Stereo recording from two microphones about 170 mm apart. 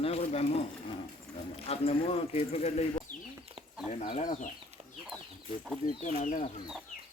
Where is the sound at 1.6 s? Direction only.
35° left (ahead or behind).